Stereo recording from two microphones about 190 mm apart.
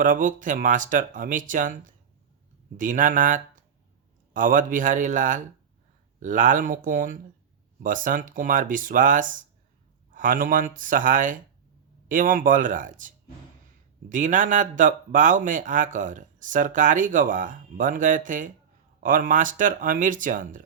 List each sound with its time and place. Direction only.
0.0 s speech: 45° right (ahead or behind)